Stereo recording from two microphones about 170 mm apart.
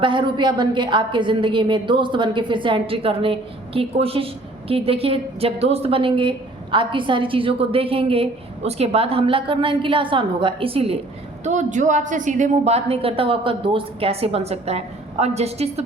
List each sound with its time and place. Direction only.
0.0 s a woman's voice: 30° right (ahead or behind)
11.4 s a woman's voice: 45° right (ahead or behind)